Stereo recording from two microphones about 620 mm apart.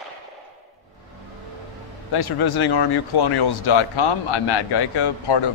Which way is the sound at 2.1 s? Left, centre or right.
Left.